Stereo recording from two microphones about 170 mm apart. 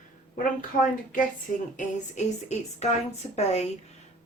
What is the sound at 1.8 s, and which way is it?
Speech, 45° left (ahead or behind).